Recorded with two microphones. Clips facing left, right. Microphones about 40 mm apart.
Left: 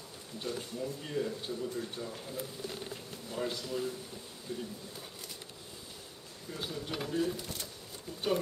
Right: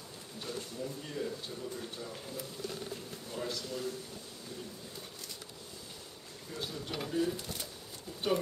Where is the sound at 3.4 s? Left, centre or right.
Centre.